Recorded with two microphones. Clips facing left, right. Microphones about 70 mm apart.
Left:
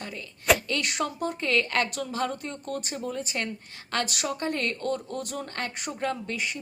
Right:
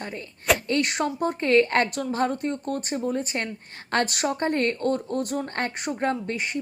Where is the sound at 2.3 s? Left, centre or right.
Right.